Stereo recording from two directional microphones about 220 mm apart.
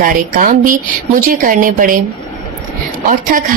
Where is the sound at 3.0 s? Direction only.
35° right (ahead or behind).